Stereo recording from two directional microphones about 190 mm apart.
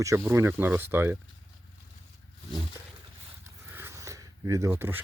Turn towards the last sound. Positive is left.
turn(degrees=-10)  # may be behind; listen again after turning